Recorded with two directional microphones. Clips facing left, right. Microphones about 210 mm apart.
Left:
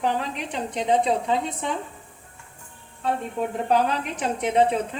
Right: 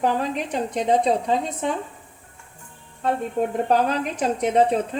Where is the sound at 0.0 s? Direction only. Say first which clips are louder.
Right 3 dB; 45° right (ahead or behind).